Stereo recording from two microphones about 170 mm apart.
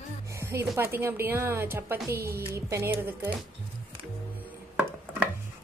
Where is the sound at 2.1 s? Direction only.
65° right (ahead or behind).